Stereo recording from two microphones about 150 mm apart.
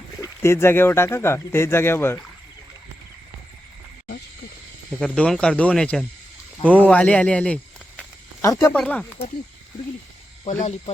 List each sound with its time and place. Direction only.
0.2 s speech: 20° left (ahead or behind)
4.9 s speech: 5° left (ahead or behind)
6.6 s a sound: 10° left (ahead or behind)
8.4 s speech: 20° left (ahead or behind)
8.7 s speech: 5° left (ahead or behind)
10.4 s speech: 50° left (ahead or behind)